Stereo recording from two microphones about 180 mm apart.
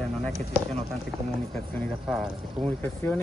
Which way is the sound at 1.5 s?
Centre (ahead or behind).